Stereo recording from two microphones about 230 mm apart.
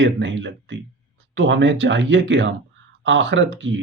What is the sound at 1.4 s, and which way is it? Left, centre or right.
Speech, right.